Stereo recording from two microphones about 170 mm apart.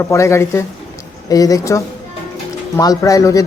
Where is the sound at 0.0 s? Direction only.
15° left (ahead or behind).